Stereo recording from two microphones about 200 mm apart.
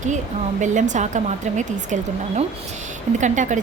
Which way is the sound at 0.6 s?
40° right (ahead or behind).